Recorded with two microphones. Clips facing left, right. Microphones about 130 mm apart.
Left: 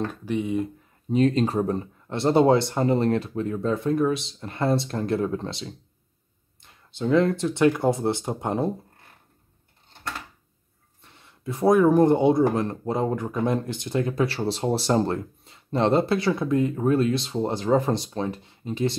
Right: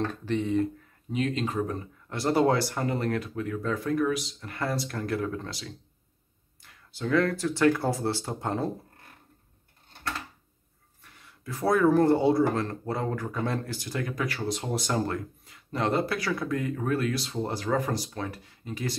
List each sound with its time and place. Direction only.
0.1 s speech: 10° left (ahead or behind)
1.1 s speech: 35° left (ahead or behind); by 8.7 s 20° left (ahead or behind)
11.0 s speech: 25° left (ahead or behind)